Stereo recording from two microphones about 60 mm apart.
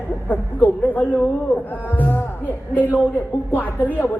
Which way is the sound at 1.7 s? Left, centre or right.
Left.